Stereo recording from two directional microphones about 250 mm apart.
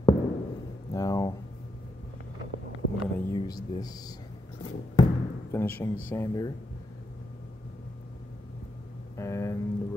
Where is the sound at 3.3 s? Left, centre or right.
Centre.